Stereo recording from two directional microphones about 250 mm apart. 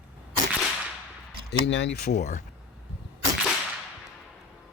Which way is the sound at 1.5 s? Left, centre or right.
Left.